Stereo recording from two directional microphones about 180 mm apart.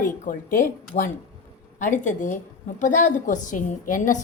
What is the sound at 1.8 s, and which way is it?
A woman's voice, 45° left (ahead or behind).